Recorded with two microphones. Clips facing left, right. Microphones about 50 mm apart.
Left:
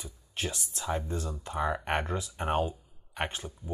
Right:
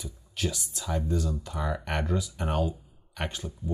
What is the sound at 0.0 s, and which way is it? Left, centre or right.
Speech, left.